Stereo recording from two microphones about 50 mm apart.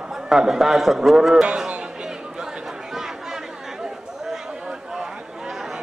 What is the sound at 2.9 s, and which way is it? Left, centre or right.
Chatter, centre.